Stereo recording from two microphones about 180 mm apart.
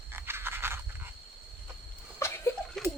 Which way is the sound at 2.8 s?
Centre (ahead or behind).